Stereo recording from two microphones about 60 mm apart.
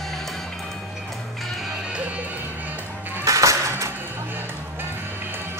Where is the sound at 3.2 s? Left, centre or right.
Right.